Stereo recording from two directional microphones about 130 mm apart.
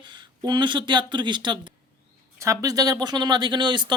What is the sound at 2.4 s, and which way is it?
Speech, 25° right (ahead or behind).